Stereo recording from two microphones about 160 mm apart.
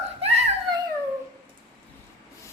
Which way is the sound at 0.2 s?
40° right (ahead or behind).